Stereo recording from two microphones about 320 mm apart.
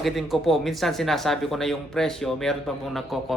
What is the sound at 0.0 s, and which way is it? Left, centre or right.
Speech, centre.